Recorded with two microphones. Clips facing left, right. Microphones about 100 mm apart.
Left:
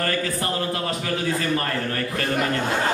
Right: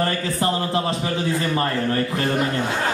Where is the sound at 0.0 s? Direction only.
25° right (ahead or behind).